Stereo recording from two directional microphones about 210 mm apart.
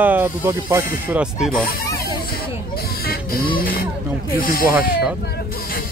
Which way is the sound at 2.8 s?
45° left (ahead or behind).